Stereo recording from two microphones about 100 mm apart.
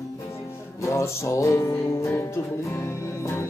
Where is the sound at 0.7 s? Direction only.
30° left (ahead or behind).